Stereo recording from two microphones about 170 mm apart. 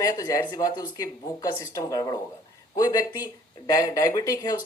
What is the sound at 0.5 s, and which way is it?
Speech, 20° left (ahead or behind).